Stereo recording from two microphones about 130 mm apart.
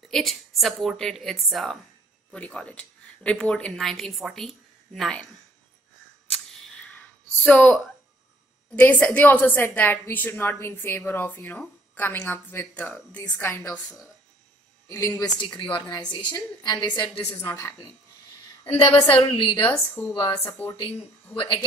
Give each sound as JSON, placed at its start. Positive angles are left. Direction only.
{"t": 0.1, "sound": "a woman's voice", "side_deg": 0}
{"t": 7.4, "sound": "a woman's voice", "side_deg": 10}
{"t": 14.9, "sound": "a woman's voice", "side_deg": 25}
{"t": 15.4, "sound": "a woman's voice", "side_deg": 40}
{"t": 17.5, "sound": "a woman's voice", "side_deg": 20}
{"t": 19.0, "sound": "a woman's voice", "side_deg": 40}
{"t": 19.9, "sound": "a woman's voice", "side_deg": 15}
{"t": 20.2, "sound": "a woman's voice", "side_deg": 40}
{"t": 20.4, "sound": "a woman's voice", "side_deg": 15}
{"t": 21.4, "sound": "a woman's voice", "side_deg": 40}